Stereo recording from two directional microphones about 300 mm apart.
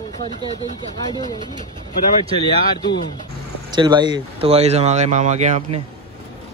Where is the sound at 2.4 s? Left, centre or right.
Centre.